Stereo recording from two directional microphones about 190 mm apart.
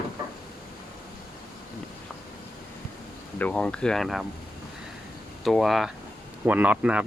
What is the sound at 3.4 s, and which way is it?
Speech, 5° left (ahead or behind).